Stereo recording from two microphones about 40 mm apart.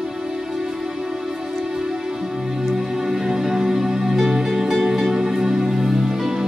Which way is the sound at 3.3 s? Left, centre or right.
Centre.